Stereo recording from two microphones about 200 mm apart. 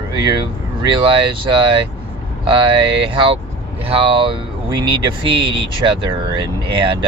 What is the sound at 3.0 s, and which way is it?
Speech, 25° right (ahead or behind).